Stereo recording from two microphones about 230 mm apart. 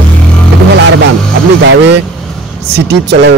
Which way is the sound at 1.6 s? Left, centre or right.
Right.